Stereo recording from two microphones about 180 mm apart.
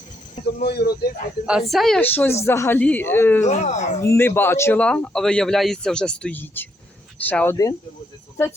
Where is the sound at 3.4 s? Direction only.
40° left (ahead or behind).